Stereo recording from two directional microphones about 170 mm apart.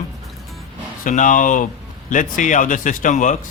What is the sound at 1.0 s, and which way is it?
Speech, 50° left (ahead or behind).